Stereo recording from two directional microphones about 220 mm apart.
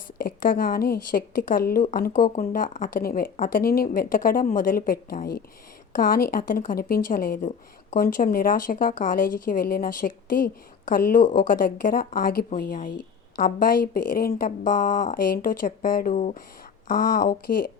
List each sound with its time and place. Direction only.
0.2 s speech: 40° left (ahead or behind)